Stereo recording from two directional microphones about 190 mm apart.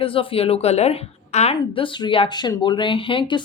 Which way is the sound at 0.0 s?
30° left (ahead or behind).